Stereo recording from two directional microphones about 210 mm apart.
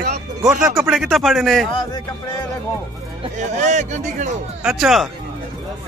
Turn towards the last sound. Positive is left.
turn(degrees=0)  # may be behind; listen again after turning